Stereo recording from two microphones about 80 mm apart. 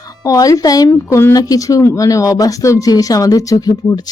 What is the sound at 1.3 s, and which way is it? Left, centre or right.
A woman's voice, left.